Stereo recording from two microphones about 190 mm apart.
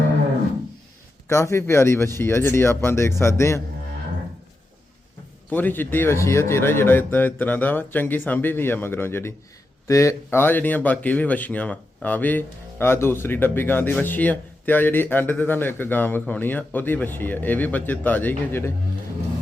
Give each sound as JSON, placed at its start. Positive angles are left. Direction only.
{"t": 1.3, "sound": "speech", "side_deg": 15}
{"t": 5.5, "sound": "speech", "side_deg": 10}